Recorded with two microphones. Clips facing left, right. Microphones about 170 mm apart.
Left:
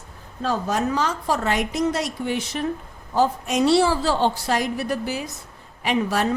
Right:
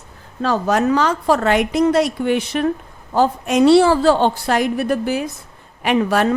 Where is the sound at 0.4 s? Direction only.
75° right (ahead or behind).